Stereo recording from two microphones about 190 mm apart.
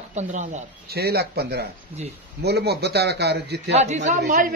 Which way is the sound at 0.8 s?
55° right (ahead or behind).